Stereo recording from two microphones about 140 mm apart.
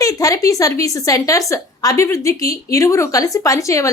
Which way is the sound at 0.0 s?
25° left (ahead or behind).